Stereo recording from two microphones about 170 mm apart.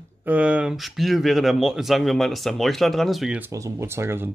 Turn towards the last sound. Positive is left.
turn(degrees=-15)  # may be behind; listen again after turning